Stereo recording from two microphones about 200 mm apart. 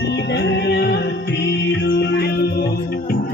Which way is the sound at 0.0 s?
60° left (ahead or behind).